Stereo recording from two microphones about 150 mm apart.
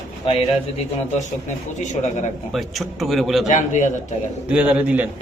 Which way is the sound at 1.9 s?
55° left (ahead or behind).